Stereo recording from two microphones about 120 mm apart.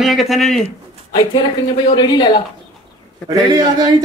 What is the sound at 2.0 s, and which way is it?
Speech, 40° left (ahead or behind).